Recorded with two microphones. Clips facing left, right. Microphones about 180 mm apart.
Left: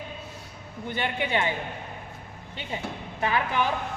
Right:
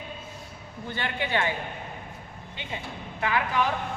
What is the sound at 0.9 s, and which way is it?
Speech, 20° left (ahead or behind).